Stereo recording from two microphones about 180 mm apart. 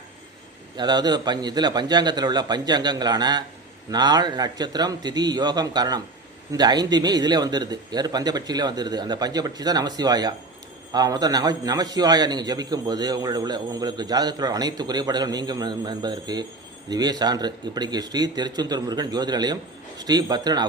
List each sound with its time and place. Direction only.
0.8 s a man's voice: 25° right (ahead or behind)